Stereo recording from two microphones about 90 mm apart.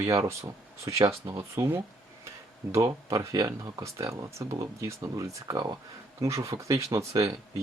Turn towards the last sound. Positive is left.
turn(degrees=-40)  # may be behind; listen again after turning